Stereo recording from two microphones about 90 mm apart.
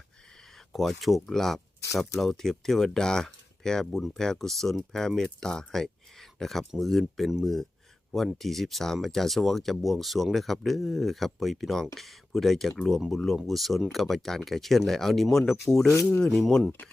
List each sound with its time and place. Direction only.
0.7 s speech: centre (ahead or behind)